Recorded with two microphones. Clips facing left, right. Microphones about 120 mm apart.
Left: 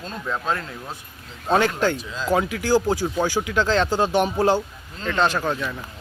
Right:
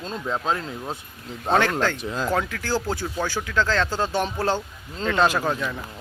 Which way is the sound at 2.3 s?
15° left (ahead or behind).